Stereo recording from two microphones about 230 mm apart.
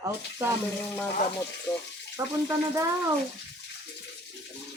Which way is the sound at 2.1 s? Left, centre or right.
Centre.